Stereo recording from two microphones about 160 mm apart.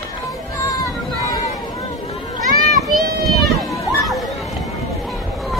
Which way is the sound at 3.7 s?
20° left (ahead or behind).